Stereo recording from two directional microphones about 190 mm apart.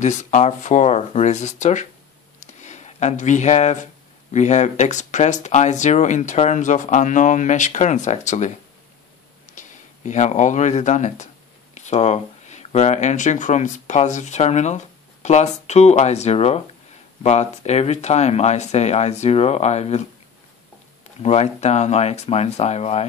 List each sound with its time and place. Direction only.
0.0 s speech: 40° left (ahead or behind)
2.4 s a sound: 40° left (ahead or behind)
4.3 s speech: 40° left (ahead or behind)
21.2 s speech: 35° left (ahead or behind)